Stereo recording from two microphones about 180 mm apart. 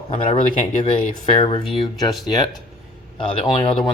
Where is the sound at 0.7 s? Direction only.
40° left (ahead or behind).